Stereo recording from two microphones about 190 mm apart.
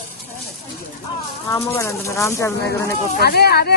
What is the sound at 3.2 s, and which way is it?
Speech, 55° left (ahead or behind).